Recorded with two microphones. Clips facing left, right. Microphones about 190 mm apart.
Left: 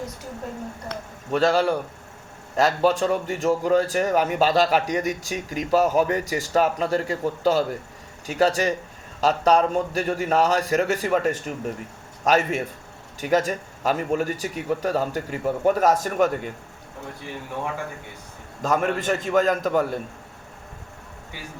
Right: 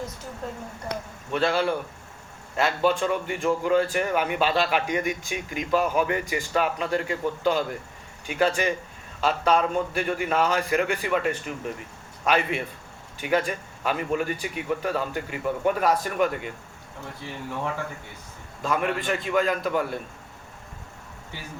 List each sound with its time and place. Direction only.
1.3 s a man's voice: 40° left (ahead or behind)
18.6 s a man's voice: 45° left (ahead or behind)